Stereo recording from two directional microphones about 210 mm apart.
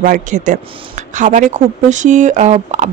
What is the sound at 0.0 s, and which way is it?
Speech, 35° right (ahead or behind).